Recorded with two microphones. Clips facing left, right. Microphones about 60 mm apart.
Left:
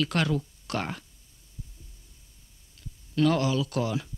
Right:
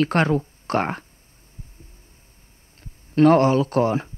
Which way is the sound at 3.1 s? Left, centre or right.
Right.